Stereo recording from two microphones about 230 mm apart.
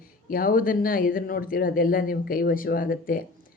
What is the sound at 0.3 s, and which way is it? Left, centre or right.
Speech, left.